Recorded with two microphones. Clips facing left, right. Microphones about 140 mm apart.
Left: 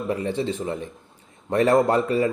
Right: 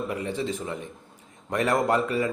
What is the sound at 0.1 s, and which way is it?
A man's voice, 35° left (ahead or behind).